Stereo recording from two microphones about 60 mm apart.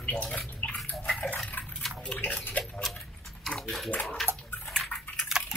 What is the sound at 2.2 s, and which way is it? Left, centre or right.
Bathtub, left.